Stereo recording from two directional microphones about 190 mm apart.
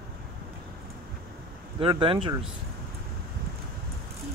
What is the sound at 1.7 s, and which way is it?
Speech, 25° right (ahead or behind).